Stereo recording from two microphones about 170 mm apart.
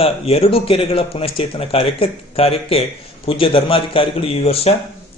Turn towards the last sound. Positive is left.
turn(degrees=35)  # may be behind; listen again after turning